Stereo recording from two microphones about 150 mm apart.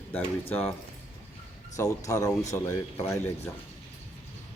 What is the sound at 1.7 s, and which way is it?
Speech, 20° left (ahead or behind).